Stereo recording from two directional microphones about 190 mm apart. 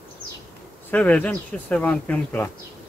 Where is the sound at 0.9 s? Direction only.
10° left (ahead or behind).